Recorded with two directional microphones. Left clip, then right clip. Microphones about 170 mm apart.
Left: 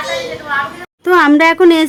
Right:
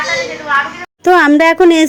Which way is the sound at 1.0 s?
15° right (ahead or behind).